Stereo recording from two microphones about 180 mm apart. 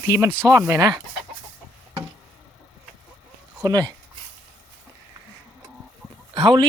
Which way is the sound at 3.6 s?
20° right (ahead or behind).